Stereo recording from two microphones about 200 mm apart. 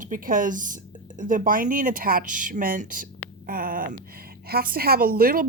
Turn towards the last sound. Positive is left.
turn(degrees=-45)  # may be behind; listen again after turning